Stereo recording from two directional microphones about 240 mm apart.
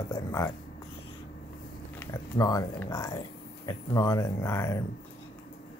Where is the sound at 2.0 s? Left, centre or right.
Centre.